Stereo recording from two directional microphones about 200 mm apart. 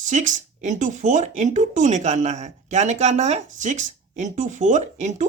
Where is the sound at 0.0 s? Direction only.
40° right (ahead or behind).